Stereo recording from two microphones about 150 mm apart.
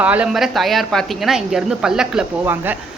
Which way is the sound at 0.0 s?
10° right (ahead or behind).